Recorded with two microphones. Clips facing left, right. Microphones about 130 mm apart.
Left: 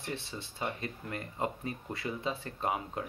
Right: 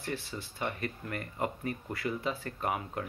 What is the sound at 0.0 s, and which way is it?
Speech, 20° left (ahead or behind).